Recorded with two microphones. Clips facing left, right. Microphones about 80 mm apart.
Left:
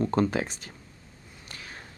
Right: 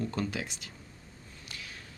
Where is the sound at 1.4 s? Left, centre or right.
Left.